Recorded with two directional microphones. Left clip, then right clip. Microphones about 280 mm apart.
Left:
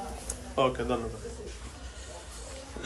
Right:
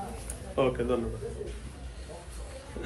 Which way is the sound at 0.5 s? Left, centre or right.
Centre.